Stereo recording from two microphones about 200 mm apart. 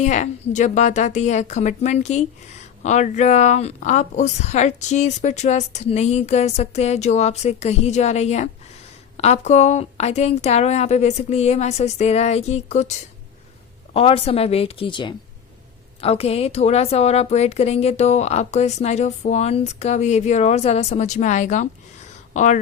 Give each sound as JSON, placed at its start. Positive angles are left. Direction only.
{"t": 0.0, "sound": "a woman's voice", "side_deg": 35}
{"t": 13.9, "sound": "a woman's voice", "side_deg": 30}
{"t": 22.3, "sound": "a sound", "side_deg": 35}